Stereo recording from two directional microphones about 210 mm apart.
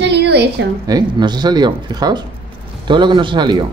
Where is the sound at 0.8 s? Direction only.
20° right (ahead or behind).